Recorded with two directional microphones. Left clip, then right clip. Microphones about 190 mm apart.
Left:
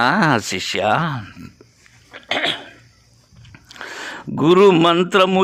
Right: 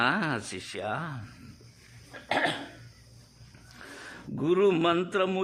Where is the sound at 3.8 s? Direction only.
40° left (ahead or behind).